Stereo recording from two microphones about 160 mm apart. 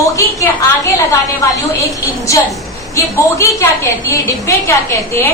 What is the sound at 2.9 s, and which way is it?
A woman's voice, 20° left (ahead or behind).